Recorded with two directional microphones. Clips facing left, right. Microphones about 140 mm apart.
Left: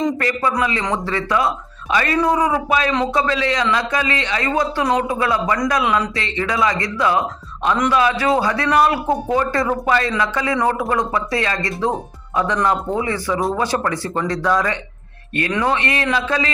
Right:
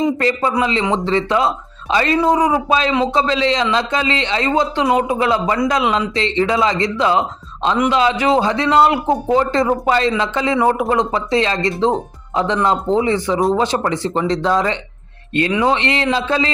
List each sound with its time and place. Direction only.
0.2 s speech: 25° right (ahead or behind)